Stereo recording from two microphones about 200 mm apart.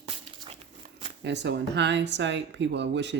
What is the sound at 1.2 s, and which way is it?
Speech, 60° right (ahead or behind).